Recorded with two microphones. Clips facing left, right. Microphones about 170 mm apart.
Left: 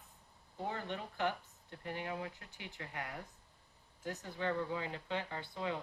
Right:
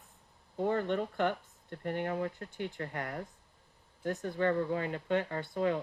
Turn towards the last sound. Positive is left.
turn(degrees=-50)  # may be behind; listen again after turning